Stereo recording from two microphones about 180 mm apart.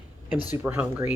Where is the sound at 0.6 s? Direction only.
10° right (ahead or behind).